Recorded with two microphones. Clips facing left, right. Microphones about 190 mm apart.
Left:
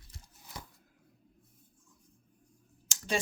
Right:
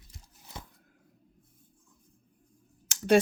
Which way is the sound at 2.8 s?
60° right (ahead or behind).